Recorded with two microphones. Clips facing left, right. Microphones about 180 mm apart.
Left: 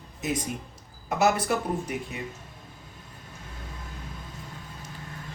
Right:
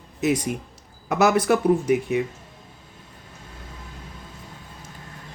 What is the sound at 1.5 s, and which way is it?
Speech, 75° right (ahead or behind).